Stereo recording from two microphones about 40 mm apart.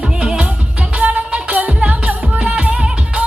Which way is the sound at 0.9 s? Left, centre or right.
Right.